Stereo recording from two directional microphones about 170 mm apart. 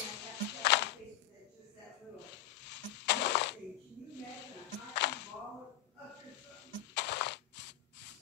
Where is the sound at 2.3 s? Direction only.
90° left.